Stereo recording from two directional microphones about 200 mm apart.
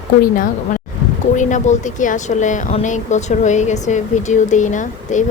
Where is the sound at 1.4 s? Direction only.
40° left (ahead or behind).